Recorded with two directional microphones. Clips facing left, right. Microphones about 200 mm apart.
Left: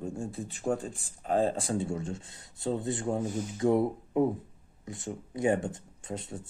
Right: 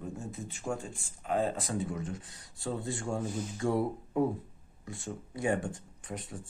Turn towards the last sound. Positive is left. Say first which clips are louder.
# left 3 dB
turn(degrees=25)  # may be behind; listen again after turning